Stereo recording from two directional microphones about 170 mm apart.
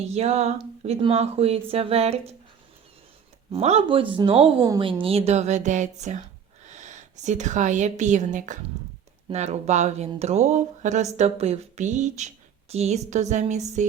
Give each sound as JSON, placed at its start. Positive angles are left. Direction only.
{"t": 0.0, "sound": "a woman's voice", "side_deg": -40}
{"t": 3.5, "sound": "a woman's voice", "side_deg": -40}